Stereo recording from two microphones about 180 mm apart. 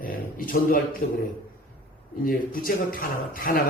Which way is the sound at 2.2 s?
50° left (ahead or behind).